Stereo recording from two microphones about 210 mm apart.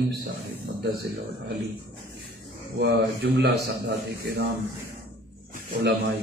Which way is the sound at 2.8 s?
55° right (ahead or behind).